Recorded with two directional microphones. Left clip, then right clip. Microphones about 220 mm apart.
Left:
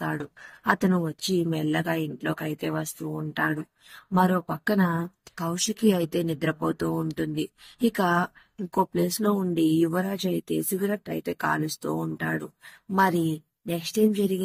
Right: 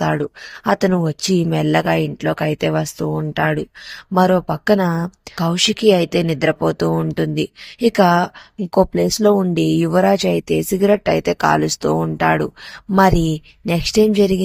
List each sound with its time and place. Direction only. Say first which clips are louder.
0.7 s speech: right 8 dB; 50° right (ahead or behind)
13.7 s speech: right 10 dB; 50° right (ahead or behind)